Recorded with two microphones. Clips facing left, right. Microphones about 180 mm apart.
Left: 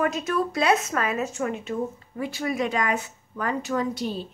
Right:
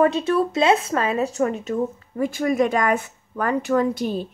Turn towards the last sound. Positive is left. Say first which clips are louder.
# right 6 dB
turn(degrees=-50)  # may be behind; listen again after turning